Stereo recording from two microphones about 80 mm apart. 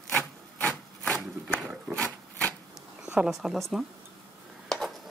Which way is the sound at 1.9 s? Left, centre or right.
Centre.